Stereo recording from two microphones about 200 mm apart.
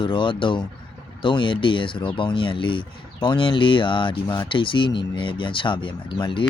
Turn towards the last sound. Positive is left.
turn(degrees=25)  # may be behind; listen again after turning